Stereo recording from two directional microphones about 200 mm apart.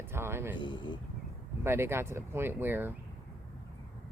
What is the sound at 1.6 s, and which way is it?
Speech, 10° right (ahead or behind).